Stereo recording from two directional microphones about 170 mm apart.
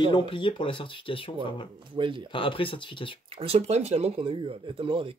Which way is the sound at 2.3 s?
30° left (ahead or behind).